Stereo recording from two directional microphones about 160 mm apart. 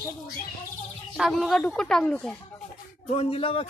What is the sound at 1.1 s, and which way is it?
Speech, centre (ahead or behind).